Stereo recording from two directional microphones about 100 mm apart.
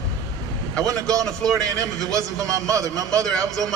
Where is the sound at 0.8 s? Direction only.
35° right (ahead or behind).